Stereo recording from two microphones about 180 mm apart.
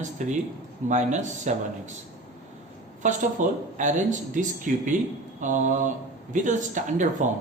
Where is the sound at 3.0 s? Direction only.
40° right (ahead or behind).